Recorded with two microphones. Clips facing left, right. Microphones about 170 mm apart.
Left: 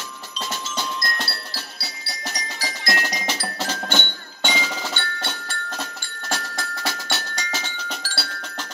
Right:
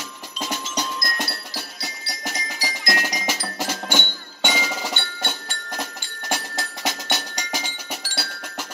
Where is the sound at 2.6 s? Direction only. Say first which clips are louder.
Even; 15° right (ahead or behind).